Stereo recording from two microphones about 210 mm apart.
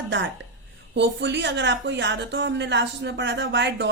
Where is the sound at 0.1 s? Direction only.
60° right (ahead or behind).